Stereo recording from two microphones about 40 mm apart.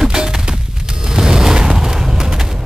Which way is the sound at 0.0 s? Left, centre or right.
Centre.